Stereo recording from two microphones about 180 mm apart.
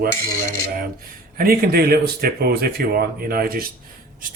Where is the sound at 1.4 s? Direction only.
55° right (ahead or behind).